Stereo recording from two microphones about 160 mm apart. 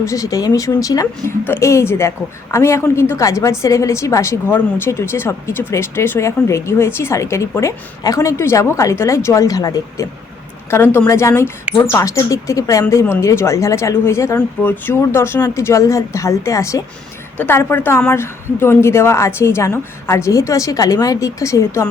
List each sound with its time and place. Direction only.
0.0 s speech: 20° left (ahead or behind)